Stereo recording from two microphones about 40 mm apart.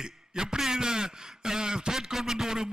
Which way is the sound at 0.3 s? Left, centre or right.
Centre.